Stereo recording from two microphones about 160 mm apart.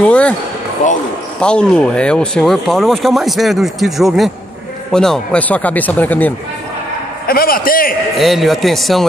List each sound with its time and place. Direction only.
0.0 s speech: 10° left (ahead or behind)
1.4 s speech: 5° left (ahead or behind)
7.2 s speech: 65° left (ahead or behind)
8.2 s speech: centre (ahead or behind)